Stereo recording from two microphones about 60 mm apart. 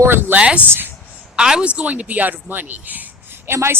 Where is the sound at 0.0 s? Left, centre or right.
Right.